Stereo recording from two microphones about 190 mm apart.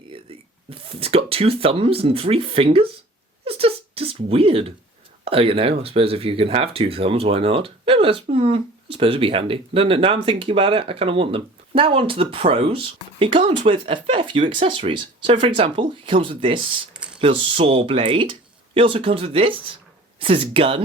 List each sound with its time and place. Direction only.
0.1 s speech: 30° right (ahead or behind)
3.4 s a sound: 30° right (ahead or behind)
5.2 s speech: 30° right (ahead or behind)